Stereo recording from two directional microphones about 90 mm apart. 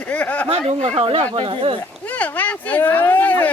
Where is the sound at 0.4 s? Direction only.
90° right.